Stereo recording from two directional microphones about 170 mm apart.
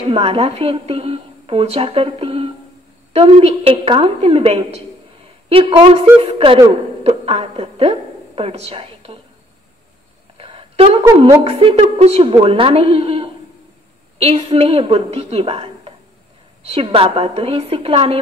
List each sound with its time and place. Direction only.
0.1 s a woman's voice: 35° right (ahead or behind)
10.3 s a sound: 35° right (ahead or behind)
11.1 s a woman's voice: 35° right (ahead or behind)